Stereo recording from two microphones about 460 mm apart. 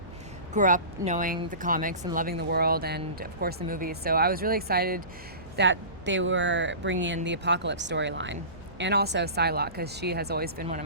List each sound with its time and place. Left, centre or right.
0.5 s speech: centre